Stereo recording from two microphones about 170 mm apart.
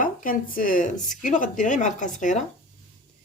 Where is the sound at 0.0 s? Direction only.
55° left (ahead or behind).